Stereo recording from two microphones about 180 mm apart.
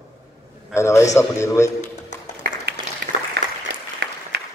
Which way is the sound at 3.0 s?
65° right (ahead or behind).